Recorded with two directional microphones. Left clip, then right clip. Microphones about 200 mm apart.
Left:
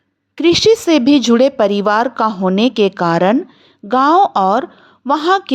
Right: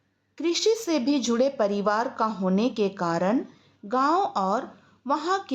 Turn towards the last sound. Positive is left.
turn(degrees=40)  # may be behind; listen again after turning